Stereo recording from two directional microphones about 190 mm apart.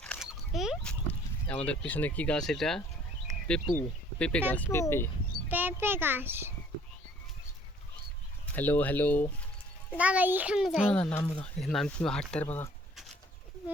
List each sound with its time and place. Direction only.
0.0 s a sound: centre (ahead or behind)
3.7 s speech: 10° left (ahead or behind)
5.5 s a child's voice: 10° right (ahead or behind)
8.5 s speech: 10° left (ahead or behind)
10.0 s speech: 10° right (ahead or behind); by 12.7 s 10° left (ahead or behind)